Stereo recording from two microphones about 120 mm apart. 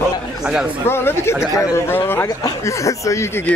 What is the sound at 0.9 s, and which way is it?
Speech, 20° left (ahead or behind).